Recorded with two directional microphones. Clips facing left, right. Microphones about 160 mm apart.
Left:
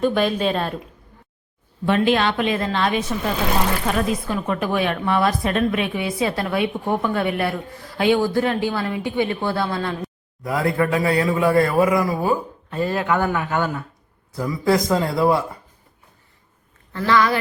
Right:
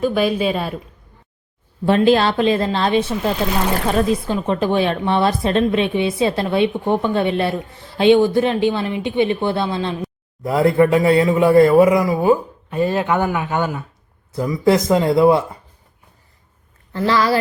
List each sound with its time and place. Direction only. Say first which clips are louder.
0.0 s speech: right 2 dB; 5° right (ahead or behind)
1.9 s a woman's voice: right 4 dB; 35° right (ahead or behind)
16.9 s a woman's voice: right 1 dB; 30° right (ahead or behind)